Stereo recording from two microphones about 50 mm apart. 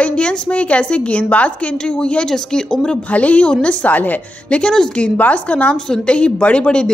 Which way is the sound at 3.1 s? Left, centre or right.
Left.